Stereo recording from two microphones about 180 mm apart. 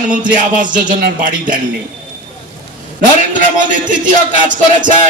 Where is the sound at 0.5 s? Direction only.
45° right (ahead or behind).